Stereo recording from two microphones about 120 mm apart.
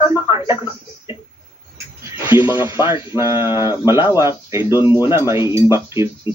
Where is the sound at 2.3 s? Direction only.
20° right (ahead or behind).